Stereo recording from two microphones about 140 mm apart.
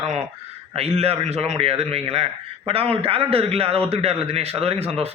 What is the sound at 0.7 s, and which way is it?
A man's voice, 45° right (ahead or behind).